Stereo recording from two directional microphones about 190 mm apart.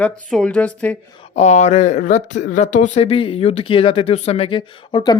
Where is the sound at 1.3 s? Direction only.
35° left (ahead or behind).